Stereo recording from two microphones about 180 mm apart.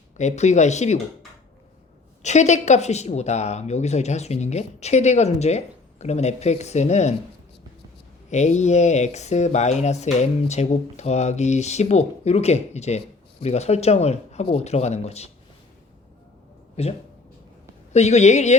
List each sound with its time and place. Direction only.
0.2 s speech: 40° left (ahead or behind)
2.2 s speech: 40° left (ahead or behind)
8.3 s speech: 40° left (ahead or behind)
17.9 s speech: 40° left (ahead or behind)